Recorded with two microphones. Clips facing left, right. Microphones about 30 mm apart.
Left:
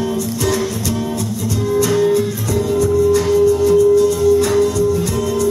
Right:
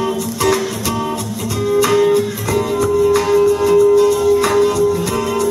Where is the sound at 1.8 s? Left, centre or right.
Right.